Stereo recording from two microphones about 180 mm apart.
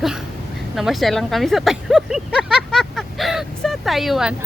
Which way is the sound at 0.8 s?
Centre (ahead or behind).